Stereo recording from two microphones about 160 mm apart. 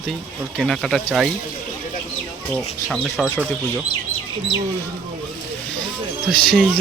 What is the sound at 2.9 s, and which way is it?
Speech, 5° left (ahead or behind).